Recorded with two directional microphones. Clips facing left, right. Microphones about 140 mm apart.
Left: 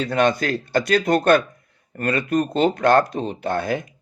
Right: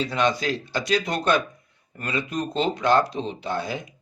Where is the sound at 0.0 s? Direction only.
50° left (ahead or behind).